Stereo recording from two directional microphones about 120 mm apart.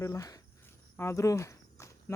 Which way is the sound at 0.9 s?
25° left (ahead or behind).